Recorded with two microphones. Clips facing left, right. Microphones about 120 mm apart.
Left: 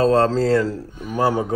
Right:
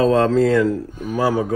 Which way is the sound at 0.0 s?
35° left (ahead or behind).